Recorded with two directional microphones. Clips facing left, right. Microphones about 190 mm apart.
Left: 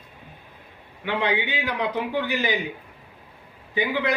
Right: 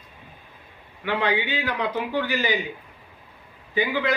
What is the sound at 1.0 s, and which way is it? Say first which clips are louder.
A man's voice: right 1 dB; 20° left (ahead or behind).